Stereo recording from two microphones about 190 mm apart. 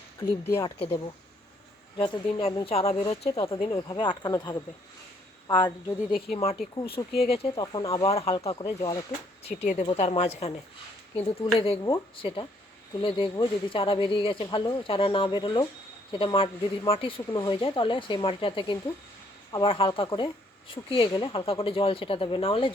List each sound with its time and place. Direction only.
0.2 s speech: 20° left (ahead or behind)
2.0 s speech: 25° left (ahead or behind)